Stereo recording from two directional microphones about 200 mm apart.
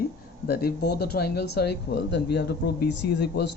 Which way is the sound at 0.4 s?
55° left (ahead or behind).